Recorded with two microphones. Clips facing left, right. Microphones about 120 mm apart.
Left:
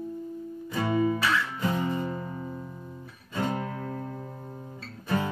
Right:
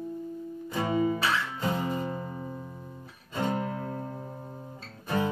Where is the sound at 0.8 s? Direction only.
20° right (ahead or behind).